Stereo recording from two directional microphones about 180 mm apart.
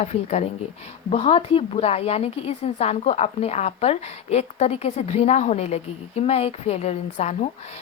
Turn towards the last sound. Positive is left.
turn(degrees=40)  # may be behind; listen again after turning